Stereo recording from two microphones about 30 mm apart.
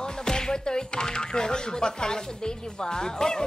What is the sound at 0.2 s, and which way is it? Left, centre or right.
Speech, left.